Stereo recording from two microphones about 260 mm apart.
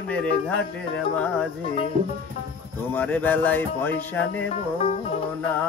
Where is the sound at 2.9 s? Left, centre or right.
Centre.